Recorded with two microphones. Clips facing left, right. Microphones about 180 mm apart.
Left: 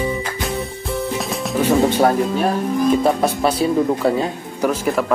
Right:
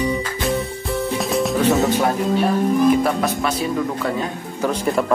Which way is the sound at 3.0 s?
30° left (ahead or behind).